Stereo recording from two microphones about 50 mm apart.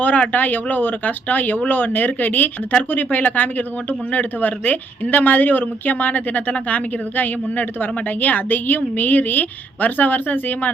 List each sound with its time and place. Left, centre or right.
0.0 s speech: left